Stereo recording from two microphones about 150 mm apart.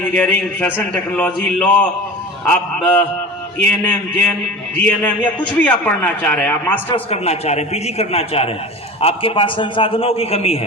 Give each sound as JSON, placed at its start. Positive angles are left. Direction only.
{"t": 0.1, "sound": "a man's voice", "side_deg": 10}
{"t": 6.9, "sound": "a man's voice", "side_deg": 45}